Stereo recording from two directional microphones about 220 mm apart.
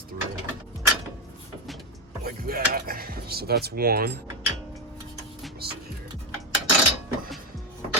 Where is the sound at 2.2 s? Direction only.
45° right (ahead or behind).